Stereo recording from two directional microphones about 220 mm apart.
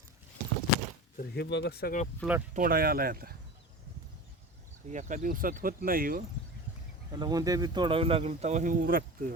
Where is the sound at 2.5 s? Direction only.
40° right (ahead or behind).